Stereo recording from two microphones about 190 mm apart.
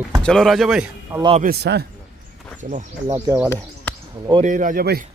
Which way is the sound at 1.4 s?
55° right (ahead or behind).